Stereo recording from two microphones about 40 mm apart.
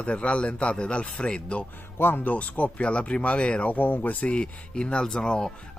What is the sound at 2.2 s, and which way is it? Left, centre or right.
Speech, left.